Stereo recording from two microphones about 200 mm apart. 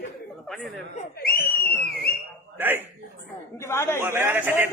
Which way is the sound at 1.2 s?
50° left (ahead or behind).